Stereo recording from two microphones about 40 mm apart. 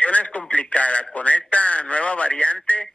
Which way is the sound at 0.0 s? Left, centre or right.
Left.